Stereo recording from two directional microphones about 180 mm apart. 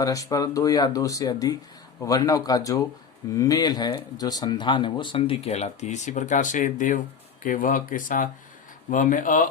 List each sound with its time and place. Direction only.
0.0 s speech: 20° left (ahead or behind); by 9.5 s 45° left (ahead or behind)